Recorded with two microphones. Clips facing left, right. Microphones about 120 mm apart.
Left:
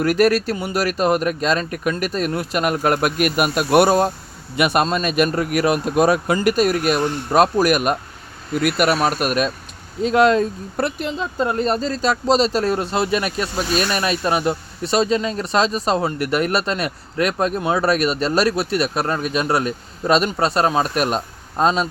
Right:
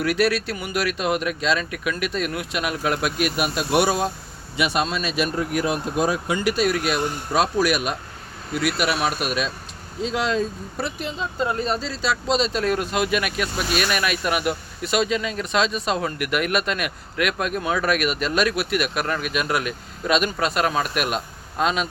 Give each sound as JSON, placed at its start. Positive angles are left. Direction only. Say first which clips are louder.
{"t": 0.0, "sound": "speech", "louder": "left 5 dB", "side_deg": 45}
{"t": 6.4, "sound": "speech", "louder": "left 4 dB", "side_deg": 45}
{"t": 11.6, "sound": "speech", "louder": "left 5 dB", "side_deg": 45}